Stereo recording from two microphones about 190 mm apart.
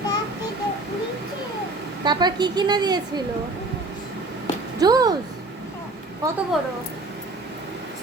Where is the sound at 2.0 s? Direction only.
20° right (ahead or behind).